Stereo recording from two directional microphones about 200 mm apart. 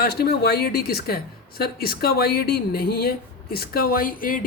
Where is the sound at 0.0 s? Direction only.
55° left (ahead or behind).